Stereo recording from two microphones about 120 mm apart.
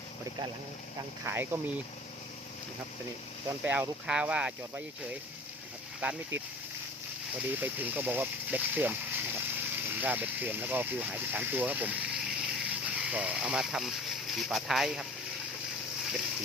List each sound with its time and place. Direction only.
1.2 s speech: 20° right (ahead or behind)
3.6 s speech: 10° right (ahead or behind)
6.0 s speech: 10° right (ahead or behind)
7.4 s speech: 15° right (ahead or behind)